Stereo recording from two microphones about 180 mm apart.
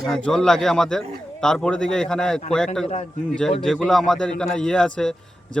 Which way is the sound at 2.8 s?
40° left (ahead or behind).